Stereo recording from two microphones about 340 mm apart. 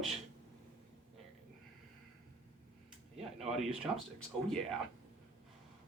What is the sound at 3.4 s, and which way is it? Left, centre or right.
Speech, centre.